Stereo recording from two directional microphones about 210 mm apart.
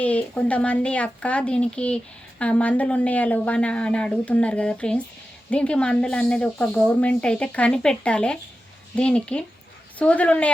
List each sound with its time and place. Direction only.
0.0 s speech: 5° left (ahead or behind)